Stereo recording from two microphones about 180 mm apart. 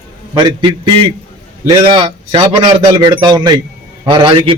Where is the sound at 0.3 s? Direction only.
25° right (ahead or behind).